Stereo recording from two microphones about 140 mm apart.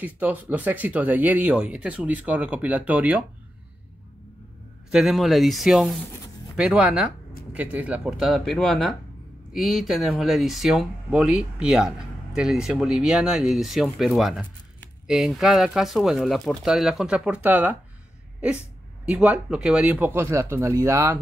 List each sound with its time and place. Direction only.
0.0 s speech: 10° right (ahead or behind)
4.9 s speech: centre (ahead or behind)
19.0 s speech: 10° right (ahead or behind)